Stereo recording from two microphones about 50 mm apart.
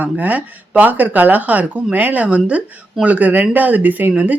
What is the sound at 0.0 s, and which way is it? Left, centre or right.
Speech, right.